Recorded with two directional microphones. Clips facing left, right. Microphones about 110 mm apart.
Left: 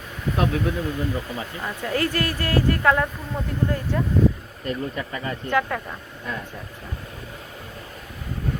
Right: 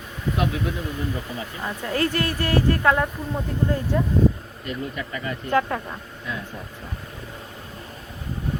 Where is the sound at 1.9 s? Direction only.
25° right (ahead or behind).